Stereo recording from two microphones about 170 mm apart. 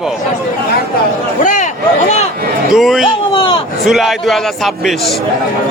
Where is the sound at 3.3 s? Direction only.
30° left (ahead or behind).